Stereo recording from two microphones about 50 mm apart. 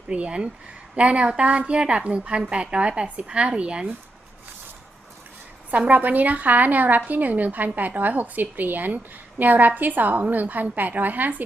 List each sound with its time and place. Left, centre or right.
0.1 s a woman's voice: right
5.7 s a woman's voice: right